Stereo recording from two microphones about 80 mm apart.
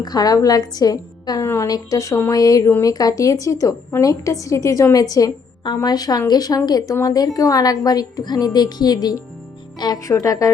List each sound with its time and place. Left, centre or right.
0.0 s a woman's voice: left
1.4 s a woman's voice: left
1.6 s a woman's voice: left
5.6 s a woman's voice: left
10.1 s a woman's voice: left